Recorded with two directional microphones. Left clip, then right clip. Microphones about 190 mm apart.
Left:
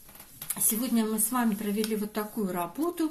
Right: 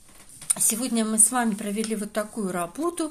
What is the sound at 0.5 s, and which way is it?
Speech, 55° right (ahead or behind).